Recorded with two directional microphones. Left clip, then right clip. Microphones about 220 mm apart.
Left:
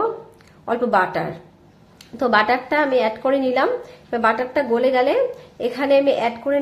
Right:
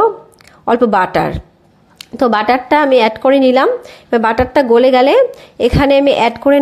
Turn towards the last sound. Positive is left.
turn(degrees=-40)  # may be behind; listen again after turning